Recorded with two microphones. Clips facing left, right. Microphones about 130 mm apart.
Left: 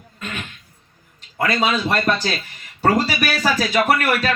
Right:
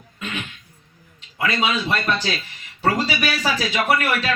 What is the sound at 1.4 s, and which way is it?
Speech, 40° left (ahead or behind).